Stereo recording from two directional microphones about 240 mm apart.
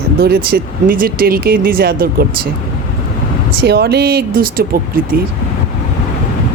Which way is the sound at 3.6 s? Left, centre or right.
Right.